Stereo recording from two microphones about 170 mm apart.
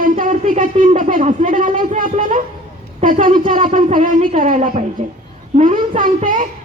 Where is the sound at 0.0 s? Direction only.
55° right (ahead or behind).